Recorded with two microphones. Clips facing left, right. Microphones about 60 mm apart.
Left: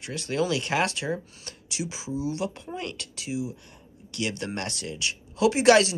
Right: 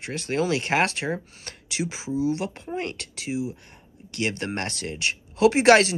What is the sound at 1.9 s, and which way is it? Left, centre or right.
Speech, right.